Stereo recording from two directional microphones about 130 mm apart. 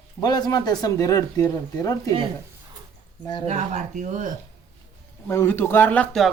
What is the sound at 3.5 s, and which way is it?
Speech, 65° right (ahead or behind).